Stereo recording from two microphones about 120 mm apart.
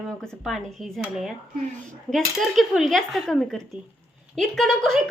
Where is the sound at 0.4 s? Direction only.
Centre (ahead or behind).